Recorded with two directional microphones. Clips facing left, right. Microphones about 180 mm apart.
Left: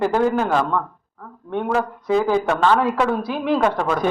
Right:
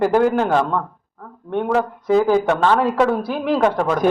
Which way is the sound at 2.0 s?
5° right (ahead or behind).